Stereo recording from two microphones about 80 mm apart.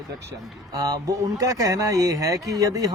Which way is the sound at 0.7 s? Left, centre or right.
Right.